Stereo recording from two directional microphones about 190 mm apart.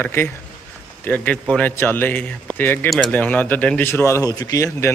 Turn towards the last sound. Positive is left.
turn(degrees=15)  # may be behind; listen again after turning